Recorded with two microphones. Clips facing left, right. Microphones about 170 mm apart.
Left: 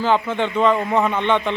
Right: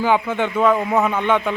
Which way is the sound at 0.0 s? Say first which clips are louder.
Right 1 dB; 10° right (ahead or behind).